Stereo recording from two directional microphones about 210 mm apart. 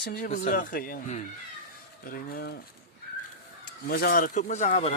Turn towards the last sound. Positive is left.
turn(degrees=35)  # may be behind; listen again after turning